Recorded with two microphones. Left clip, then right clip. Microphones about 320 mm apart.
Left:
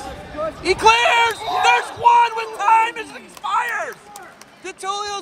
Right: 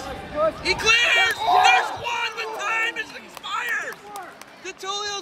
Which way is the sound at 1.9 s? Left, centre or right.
Centre.